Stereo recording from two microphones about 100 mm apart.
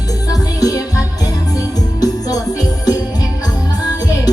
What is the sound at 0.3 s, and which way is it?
Music, 35° left (ahead or behind).